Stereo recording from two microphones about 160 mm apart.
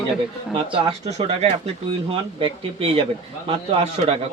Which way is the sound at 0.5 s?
35° right (ahead or behind).